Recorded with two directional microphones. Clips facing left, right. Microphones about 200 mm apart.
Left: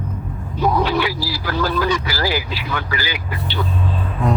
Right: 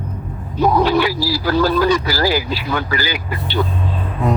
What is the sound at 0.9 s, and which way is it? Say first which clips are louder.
Speech: right 4 dB; 40° right (ahead or behind).